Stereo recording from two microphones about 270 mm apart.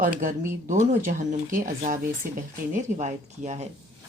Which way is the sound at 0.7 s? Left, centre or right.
Right.